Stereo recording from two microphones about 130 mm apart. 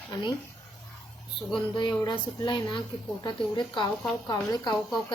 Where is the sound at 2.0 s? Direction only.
35° left (ahead or behind).